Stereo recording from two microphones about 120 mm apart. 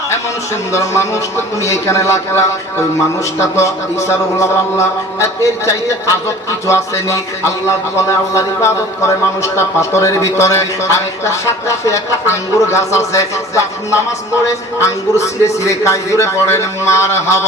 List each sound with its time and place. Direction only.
0.7 s a man's voice: 25° left (ahead or behind)
3.4 s a man's voice: 20° left (ahead or behind)